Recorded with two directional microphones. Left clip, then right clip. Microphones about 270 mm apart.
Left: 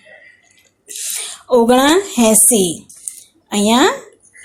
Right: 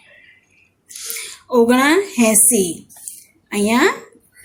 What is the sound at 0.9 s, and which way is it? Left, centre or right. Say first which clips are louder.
A woman's voice: left 4 dB; centre.